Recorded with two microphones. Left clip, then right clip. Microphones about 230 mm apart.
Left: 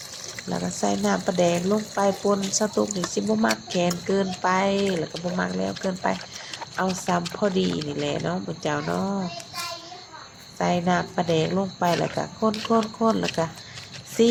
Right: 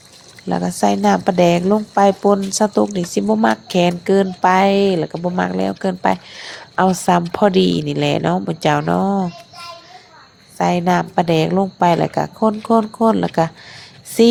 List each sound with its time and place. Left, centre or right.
0.5 s speech: right
10.6 s speech: right